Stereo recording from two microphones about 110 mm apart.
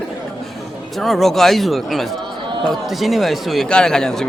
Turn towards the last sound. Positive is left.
turn(degrees=5)  # may be behind; listen again after turning